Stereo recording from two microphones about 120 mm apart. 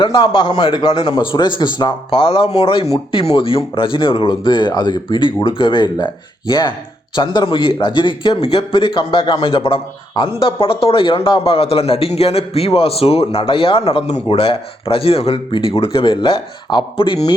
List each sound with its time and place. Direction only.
0.0 s a man's voice: 40° left (ahead or behind)